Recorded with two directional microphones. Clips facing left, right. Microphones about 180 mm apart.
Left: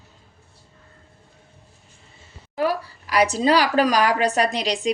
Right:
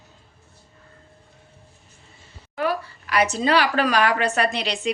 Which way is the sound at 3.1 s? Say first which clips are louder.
Left 2 dB; 35° left (ahead or behind).